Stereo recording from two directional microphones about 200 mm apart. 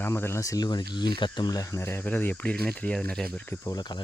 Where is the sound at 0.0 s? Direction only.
10° left (ahead or behind).